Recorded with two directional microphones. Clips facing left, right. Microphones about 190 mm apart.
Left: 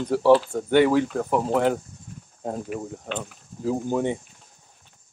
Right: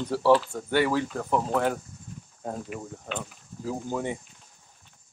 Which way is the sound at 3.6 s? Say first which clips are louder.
Left 6 dB; 20° left (ahead or behind).